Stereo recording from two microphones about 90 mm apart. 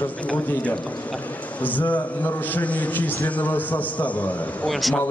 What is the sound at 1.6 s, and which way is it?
A man's voice, 15° left (ahead or behind).